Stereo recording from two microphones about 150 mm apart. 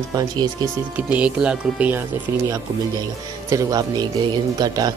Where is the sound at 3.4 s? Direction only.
25° right (ahead or behind).